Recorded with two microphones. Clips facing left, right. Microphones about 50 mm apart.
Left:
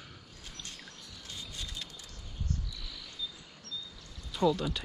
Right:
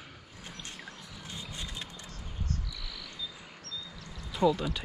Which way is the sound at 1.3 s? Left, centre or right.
Right.